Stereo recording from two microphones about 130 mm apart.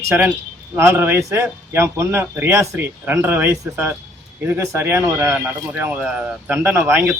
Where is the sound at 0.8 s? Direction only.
20° right (ahead or behind).